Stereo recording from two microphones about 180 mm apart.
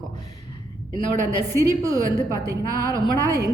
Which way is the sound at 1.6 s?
20° right (ahead or behind).